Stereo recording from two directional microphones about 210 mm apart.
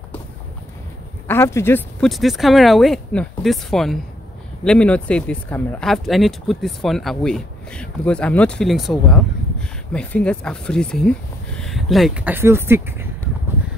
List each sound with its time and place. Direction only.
1.2 s speech: 10° left (ahead or behind); by 13.1 s 10° right (ahead or behind)